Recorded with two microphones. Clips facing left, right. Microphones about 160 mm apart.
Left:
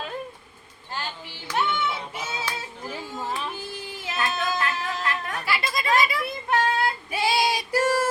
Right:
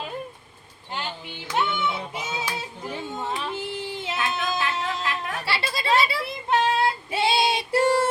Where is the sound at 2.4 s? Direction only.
10° right (ahead or behind).